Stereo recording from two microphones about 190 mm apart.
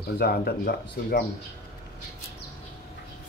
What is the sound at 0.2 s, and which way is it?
Speech, 55° left (ahead or behind).